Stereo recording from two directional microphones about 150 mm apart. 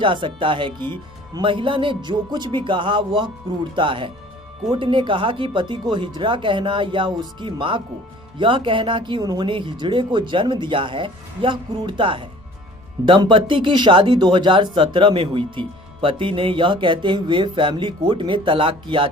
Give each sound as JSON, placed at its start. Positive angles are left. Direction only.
{"t": 0.0, "sound": "speech", "side_deg": -35}